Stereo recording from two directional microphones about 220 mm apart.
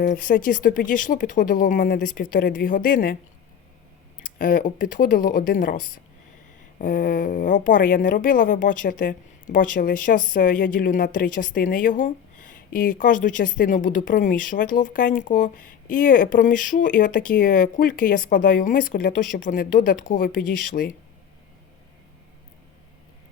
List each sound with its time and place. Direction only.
0.0 s a woman's voice: 40° left (ahead or behind)
4.2 s a woman's voice: 40° left (ahead or behind)